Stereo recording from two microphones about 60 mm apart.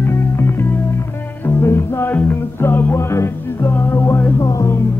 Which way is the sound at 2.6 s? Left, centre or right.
Left.